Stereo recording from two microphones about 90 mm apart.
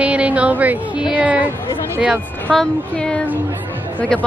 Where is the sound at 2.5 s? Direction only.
5° left (ahead or behind).